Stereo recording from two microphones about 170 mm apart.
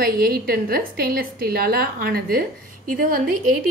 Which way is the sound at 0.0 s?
60° right (ahead or behind).